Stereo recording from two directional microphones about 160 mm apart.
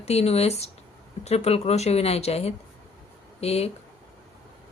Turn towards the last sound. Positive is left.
turn(degrees=40)  # may be behind; listen again after turning